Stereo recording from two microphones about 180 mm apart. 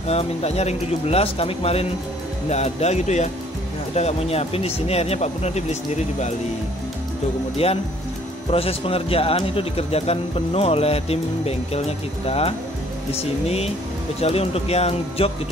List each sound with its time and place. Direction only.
0.1 s a man's voice: 35° left (ahead or behind)
7.5 s a man's voice: 35° left (ahead or behind)
14.2 s a man's voice: 35° left (ahead or behind)